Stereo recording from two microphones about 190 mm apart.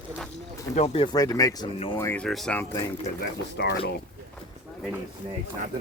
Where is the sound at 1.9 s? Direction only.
10° left (ahead or behind).